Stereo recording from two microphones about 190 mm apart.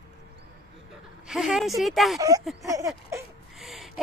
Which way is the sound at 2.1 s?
20° right (ahead or behind).